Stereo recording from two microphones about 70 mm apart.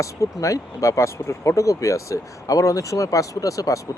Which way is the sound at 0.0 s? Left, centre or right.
Left.